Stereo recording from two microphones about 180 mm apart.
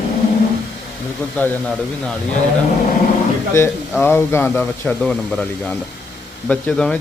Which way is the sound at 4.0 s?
15° left (ahead or behind).